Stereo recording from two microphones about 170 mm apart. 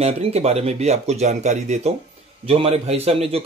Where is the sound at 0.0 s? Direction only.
40° right (ahead or behind).